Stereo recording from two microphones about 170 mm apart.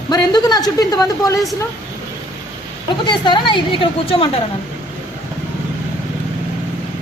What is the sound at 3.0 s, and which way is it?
A woman's voice, 25° left (ahead or behind).